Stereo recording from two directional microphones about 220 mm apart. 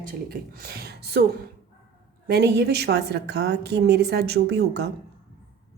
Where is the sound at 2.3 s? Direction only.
50° right (ahead or behind).